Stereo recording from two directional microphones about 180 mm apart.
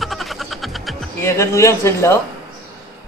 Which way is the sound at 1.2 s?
15° left (ahead or behind).